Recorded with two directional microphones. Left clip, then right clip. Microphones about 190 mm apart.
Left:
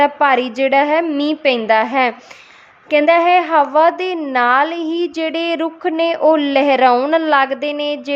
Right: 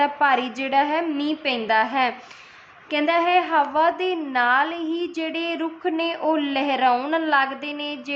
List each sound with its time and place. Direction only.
0.0 s a woman's voice: 40° left (ahead or behind)